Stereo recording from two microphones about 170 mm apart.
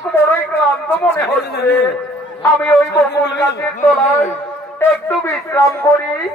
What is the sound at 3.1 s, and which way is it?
Speech, 85° left.